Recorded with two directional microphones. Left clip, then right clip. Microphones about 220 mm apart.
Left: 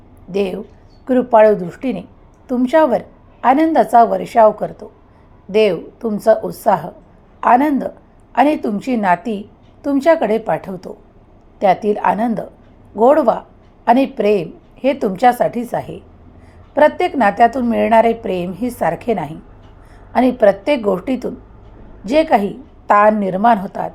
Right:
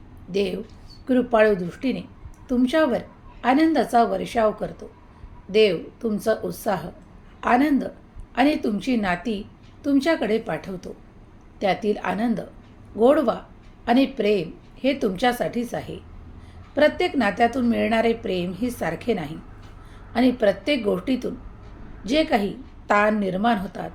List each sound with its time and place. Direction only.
0.3 s a woman's voice: 10° left (ahead or behind)